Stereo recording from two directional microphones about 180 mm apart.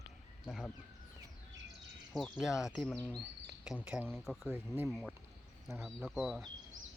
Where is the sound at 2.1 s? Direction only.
Centre (ahead or behind).